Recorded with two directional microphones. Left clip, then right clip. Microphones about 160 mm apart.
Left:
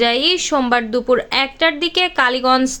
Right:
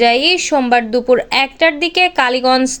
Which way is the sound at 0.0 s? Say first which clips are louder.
Right 4 dB; 15° right (ahead or behind).